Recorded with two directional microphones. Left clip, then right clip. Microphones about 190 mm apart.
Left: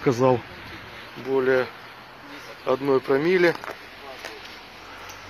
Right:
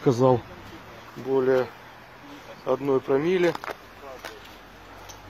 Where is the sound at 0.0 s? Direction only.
25° right (ahead or behind).